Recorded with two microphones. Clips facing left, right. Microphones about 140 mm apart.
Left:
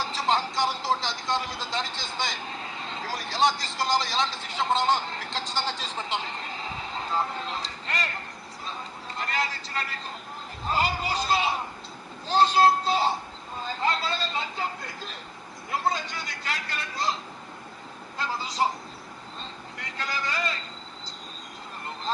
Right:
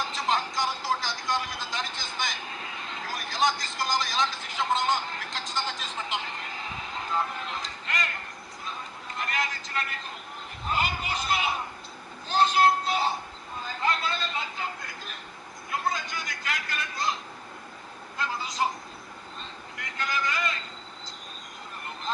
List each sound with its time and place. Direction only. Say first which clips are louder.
0.0 s speech: left 2 dB; 30° left (ahead or behind)
9.1 s a man's voice: left 1 dB; 30° left (ahead or behind)
18.2 s speech: left 2 dB; 30° left (ahead or behind)
19.8 s speech: right 2 dB; 30° left (ahead or behind)